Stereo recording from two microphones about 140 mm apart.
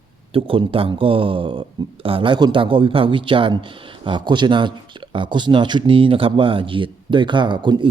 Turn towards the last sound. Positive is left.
turn(degrees=-35)  # may be behind; listen again after turning